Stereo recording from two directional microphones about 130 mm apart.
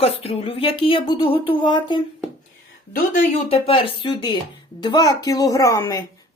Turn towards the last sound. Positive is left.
turn(degrees=30)  # may be behind; listen again after turning